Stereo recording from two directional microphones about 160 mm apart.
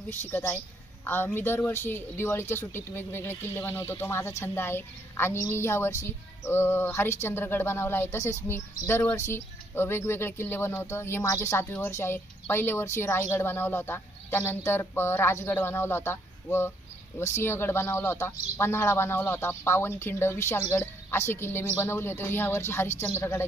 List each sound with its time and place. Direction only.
0.3 s speech: 10° left (ahead or behind)